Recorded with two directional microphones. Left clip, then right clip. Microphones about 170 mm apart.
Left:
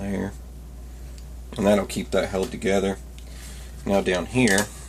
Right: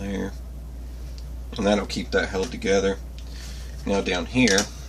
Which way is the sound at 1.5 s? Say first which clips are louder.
Left 2 dB; 50° left (ahead or behind).